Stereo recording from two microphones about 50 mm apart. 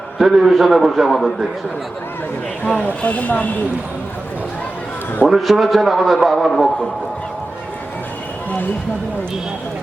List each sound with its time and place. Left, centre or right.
0.2 s a man's voice: centre
3.0 s speech: left
5.3 s a man's voice: centre